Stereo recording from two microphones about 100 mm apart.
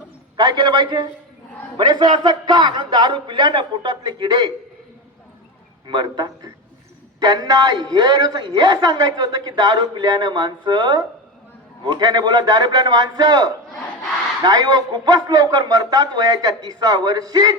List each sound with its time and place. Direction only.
0.3 s a man's voice: 45° right (ahead or behind)
5.9 s a man's voice: 45° right (ahead or behind)